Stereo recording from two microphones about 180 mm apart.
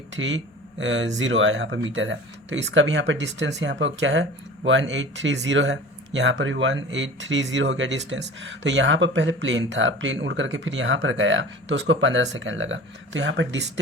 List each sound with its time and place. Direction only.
0.1 s speech: 90° right